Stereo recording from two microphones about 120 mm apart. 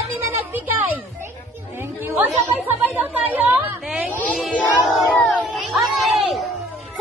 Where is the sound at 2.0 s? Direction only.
20° right (ahead or behind).